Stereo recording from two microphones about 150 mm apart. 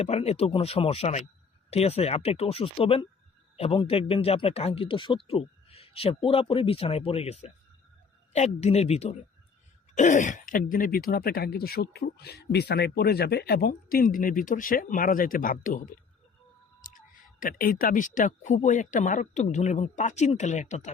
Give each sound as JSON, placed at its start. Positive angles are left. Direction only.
{"t": 0.0, "sound": "speech", "side_deg": 45}
{"t": 9.9, "sound": "speech", "side_deg": 55}
{"t": 17.4, "sound": "speech", "side_deg": 75}